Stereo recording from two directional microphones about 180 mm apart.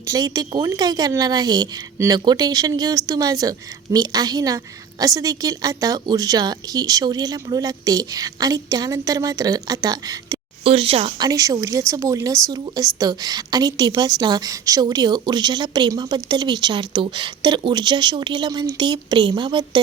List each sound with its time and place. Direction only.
0.0 s a woman's voice: 20° right (ahead or behind)
10.6 s speech: 30° right (ahead or behind)
11.3 s a woman's voice: 20° right (ahead or behind)